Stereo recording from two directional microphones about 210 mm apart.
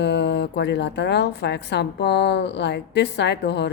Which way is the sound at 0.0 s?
55° left (ahead or behind).